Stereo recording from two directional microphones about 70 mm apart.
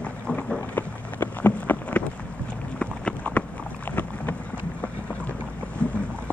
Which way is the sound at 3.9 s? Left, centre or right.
Left.